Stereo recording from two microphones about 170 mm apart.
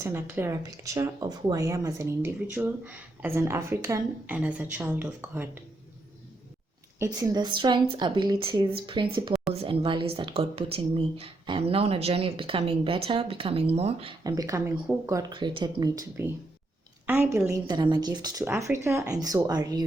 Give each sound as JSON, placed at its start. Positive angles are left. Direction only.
{"t": 0.0, "sound": "speech", "side_deg": -15}
{"t": 7.0, "sound": "a woman's voice", "side_deg": -25}
{"t": 14.3, "sound": "speech", "side_deg": -20}